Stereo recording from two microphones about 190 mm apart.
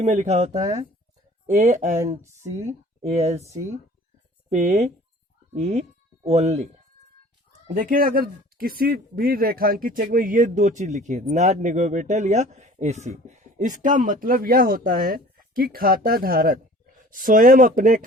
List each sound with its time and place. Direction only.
0.0 s speech: 35° right (ahead or behind)
0.5 s speech: 20° right (ahead or behind)
1.5 s speech: 40° right (ahead or behind)
3.0 s speech: 35° right (ahead or behind)
4.4 s speech: 35° right (ahead or behind)
7.7 s speech: 45° right (ahead or behind)